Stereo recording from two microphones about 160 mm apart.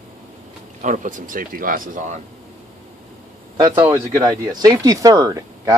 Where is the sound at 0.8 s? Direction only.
55° right (ahead or behind).